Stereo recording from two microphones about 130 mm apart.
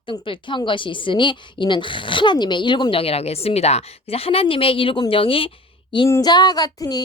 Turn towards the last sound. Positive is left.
turn(degrees=30)  # may be behind; listen again after turning